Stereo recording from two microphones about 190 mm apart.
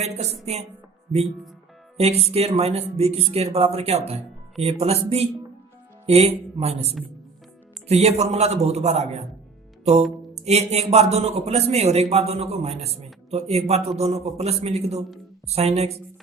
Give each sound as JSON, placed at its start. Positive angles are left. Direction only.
{"t": 0.0, "sound": "a man's voice", "side_deg": -35}
{"t": 2.0, "sound": "a man's voice", "side_deg": -30}
{"t": 10.3, "sound": "a man's voice", "side_deg": -35}